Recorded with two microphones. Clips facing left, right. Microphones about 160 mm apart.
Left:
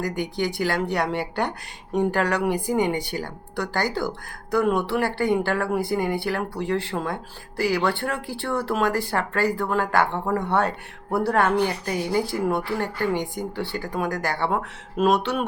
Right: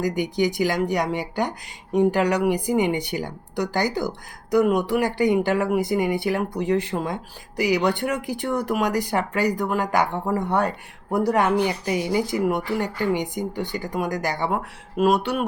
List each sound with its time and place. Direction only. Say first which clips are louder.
0.0 s speech: right 4 dB; 15° right (ahead or behind)